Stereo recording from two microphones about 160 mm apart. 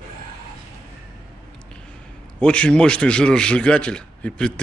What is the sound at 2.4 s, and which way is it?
A man's voice, 5° left (ahead or behind).